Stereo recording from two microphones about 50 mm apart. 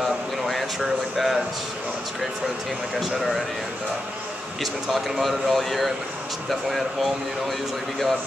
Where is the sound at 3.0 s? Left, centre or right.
Centre.